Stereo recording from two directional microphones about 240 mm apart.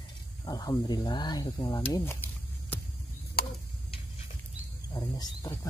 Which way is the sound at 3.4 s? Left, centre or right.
Left.